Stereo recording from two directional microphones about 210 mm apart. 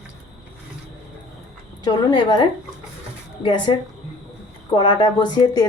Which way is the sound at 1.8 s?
20° left (ahead or behind).